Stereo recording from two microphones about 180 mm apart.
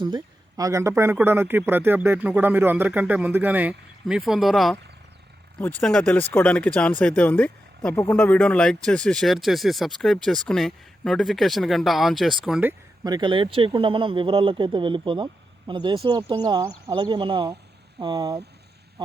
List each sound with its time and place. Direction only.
0.0 s speech: 20° right (ahead or behind); by 12.7 s 5° right (ahead or behind)
13.1 s speech: 25° right (ahead or behind)